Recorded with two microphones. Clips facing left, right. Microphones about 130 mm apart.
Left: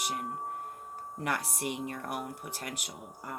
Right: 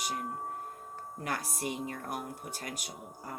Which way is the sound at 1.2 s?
65° left (ahead or behind).